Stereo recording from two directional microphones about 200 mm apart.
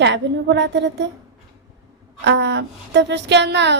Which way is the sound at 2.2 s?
60° right (ahead or behind).